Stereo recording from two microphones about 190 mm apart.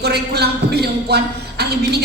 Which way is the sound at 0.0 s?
60° right (ahead or behind).